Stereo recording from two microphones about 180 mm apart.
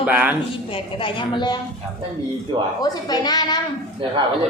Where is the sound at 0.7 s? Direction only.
30° left (ahead or behind).